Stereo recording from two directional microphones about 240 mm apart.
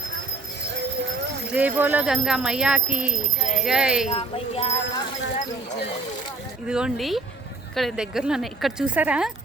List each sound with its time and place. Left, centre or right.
1.5 s speech: centre
4.1 s speech: left
6.7 s speech: centre